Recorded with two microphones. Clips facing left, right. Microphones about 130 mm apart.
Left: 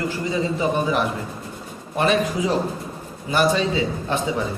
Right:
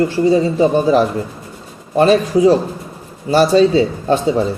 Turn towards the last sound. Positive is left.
turn(degrees=-35)  # may be behind; listen again after turning